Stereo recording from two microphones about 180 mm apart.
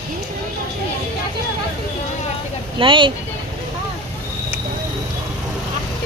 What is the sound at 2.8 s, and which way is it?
Speech, 30° right (ahead or behind).